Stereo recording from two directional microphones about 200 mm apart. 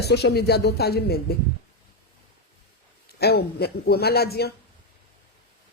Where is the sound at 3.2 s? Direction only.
50° left (ahead or behind).